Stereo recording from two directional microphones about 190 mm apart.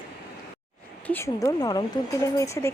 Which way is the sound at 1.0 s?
10° left (ahead or behind).